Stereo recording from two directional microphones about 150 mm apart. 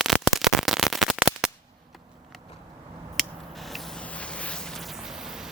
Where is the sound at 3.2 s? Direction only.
Centre (ahead or behind).